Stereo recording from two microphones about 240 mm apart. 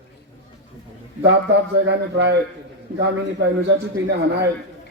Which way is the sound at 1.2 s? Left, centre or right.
Right.